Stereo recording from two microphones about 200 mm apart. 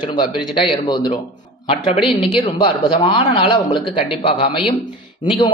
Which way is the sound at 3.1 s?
25° left (ahead or behind).